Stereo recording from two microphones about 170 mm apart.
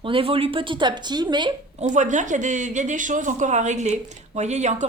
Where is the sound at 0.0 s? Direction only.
30° right (ahead or behind).